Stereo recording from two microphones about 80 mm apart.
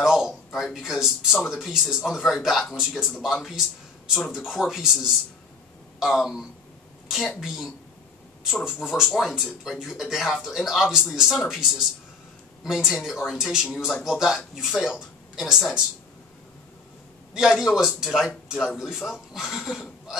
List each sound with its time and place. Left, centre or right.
0.0 s a sound: centre
0.7 s speech: centre
4.3 s speech: centre
17.3 s speech: centre